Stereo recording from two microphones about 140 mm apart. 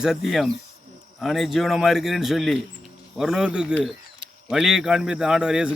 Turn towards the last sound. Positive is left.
turn(degrees=-5)  # may be behind; listen again after turning